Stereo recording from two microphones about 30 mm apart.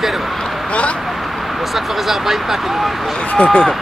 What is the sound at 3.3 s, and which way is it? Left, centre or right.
Speech, left.